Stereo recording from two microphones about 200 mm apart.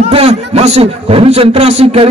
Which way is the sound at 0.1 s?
30° right (ahead or behind).